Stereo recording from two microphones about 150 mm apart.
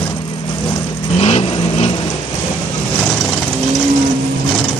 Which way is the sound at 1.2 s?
45° left (ahead or behind).